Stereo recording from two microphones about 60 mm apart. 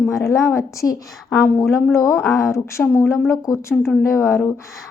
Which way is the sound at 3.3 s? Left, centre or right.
Left.